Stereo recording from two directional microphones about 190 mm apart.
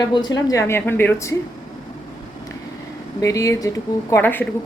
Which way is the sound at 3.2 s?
15° left (ahead or behind).